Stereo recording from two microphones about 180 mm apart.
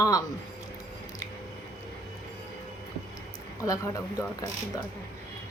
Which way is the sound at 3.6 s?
20° left (ahead or behind).